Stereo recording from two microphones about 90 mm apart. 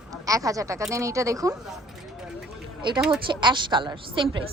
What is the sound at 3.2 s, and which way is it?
A woman's voice, 60° right (ahead or behind).